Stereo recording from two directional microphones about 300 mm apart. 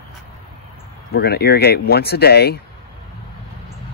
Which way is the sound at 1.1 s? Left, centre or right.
Left.